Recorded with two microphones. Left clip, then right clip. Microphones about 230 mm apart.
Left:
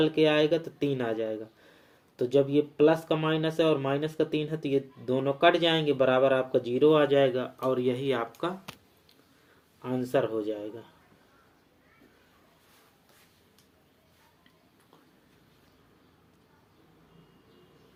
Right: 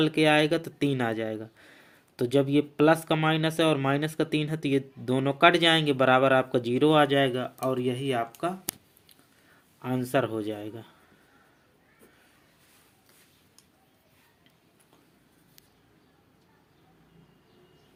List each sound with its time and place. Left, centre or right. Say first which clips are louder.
0.0 s speech: right 1 dB; right
9.8 s speech: right 1 dB; right